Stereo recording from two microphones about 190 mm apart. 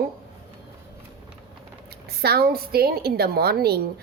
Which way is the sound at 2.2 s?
55° right (ahead or behind).